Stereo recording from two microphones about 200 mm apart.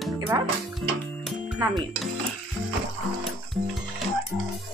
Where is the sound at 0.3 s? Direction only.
15° right (ahead or behind).